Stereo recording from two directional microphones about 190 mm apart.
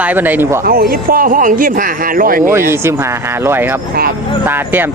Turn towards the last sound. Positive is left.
turn(degrees=-10)  # may be behind; listen again after turning